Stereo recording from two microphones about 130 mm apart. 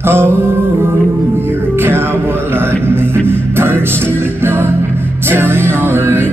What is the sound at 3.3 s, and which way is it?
Music, 15° right (ahead or behind).